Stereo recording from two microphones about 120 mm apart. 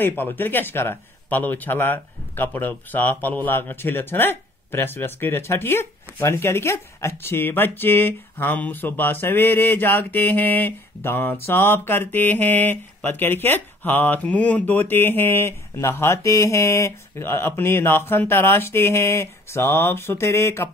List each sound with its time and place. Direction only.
0.0 s speech: 15° left (ahead or behind)